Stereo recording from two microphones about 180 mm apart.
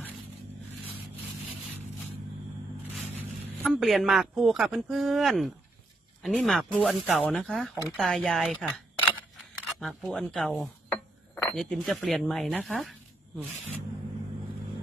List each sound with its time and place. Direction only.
2.8 s speech: 5° left (ahead or behind)
8.6 s camera: 5° left (ahead or behind)
9.8 s speech: centre (ahead or behind)